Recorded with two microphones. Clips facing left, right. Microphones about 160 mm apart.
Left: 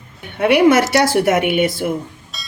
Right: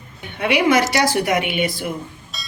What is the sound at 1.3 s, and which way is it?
Speech, 55° left (ahead or behind).